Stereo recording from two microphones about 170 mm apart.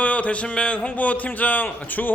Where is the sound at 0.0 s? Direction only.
10° left (ahead or behind).